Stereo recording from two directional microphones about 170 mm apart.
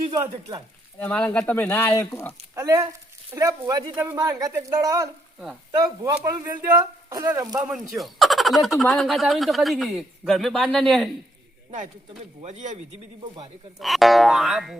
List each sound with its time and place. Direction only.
0.1 s speech: 20° right (ahead or behind)
0.9 s speech: 10° left (ahead or behind)
2.6 s speech: 20° right (ahead or behind)
7.7 s a man's voice: centre (ahead or behind)
12.4 s speech: 45° right (ahead or behind)
13.7 s a man's voice: centre (ahead or behind)